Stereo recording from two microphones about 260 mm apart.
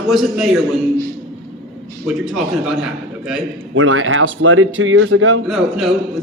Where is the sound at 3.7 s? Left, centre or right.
Right.